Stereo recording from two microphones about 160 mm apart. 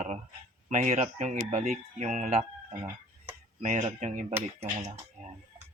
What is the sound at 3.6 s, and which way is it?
Speech, 50° right (ahead or behind).